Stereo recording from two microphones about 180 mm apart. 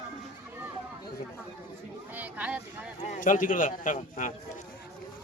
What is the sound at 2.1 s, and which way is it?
Speech, 10° right (ahead or behind).